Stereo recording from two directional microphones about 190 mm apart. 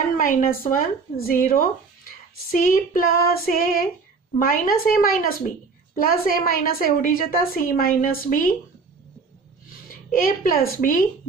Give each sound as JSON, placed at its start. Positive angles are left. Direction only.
{"t": 0.2, "sound": "a woman's voice", "side_deg": 50}
{"t": 1.5, "sound": "a sound", "side_deg": 50}
{"t": 2.5, "sound": "a woman's voice", "side_deg": 45}
{"t": 9.8, "sound": "speech", "side_deg": 50}